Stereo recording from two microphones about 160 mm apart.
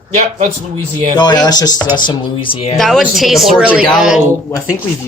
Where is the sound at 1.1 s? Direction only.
25° left (ahead or behind).